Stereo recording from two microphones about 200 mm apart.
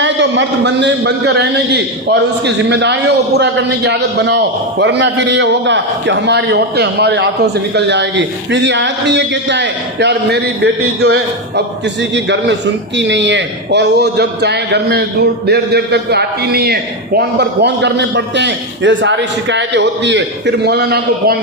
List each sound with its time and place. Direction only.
0.0 s a man's voice: 65° right (ahead or behind)